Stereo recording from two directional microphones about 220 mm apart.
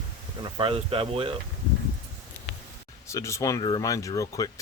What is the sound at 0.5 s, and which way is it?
Speech, 25° right (ahead or behind).